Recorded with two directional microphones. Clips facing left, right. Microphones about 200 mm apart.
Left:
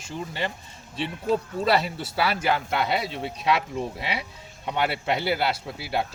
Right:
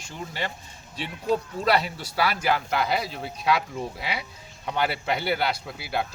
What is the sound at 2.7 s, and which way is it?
Speech, centre (ahead or behind).